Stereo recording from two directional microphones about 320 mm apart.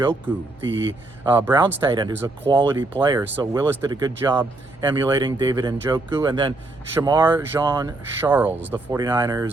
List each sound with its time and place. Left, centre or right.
0.7 s speech: right
1.2 s speech: centre